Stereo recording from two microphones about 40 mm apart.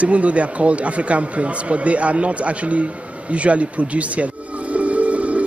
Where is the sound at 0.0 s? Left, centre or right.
Right.